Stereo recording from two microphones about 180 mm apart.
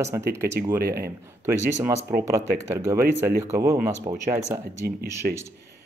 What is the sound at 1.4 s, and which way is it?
Speech, 15° right (ahead or behind).